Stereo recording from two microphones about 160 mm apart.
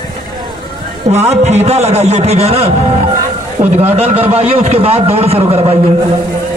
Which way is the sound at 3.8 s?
40° right (ahead or behind).